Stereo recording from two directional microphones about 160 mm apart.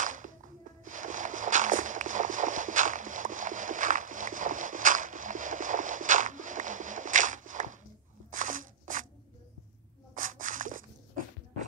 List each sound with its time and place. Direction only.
0.0 s walk: 55° right (ahead or behind)
8.3 s crunch: 55° right (ahead or behind)
10.1 s a sound: 55° right (ahead or behind)